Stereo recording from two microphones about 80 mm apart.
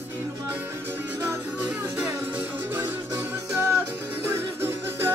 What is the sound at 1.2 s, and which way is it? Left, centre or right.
Music, right.